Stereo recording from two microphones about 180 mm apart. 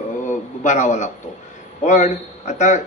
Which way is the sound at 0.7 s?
45° left (ahead or behind).